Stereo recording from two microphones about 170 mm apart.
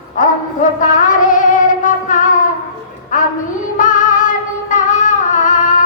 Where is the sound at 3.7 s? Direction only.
50° left (ahead or behind).